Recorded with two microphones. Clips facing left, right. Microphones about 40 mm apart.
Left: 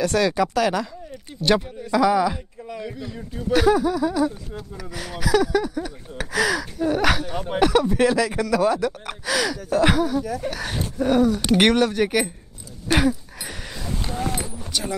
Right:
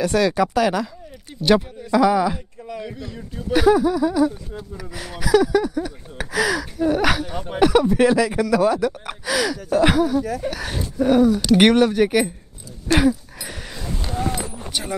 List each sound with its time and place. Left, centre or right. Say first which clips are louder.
0.0 s speech: right 2 dB; centre
14.7 s speech: even; right